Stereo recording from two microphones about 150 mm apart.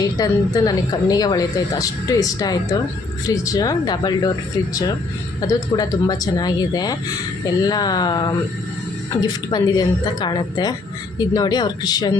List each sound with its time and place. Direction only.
0.0 s speech: 25° left (ahead or behind)
5.4 s speech: 25° left (ahead or behind)